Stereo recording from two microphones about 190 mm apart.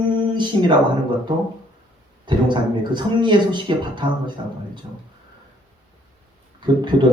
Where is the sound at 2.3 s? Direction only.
25° right (ahead or behind).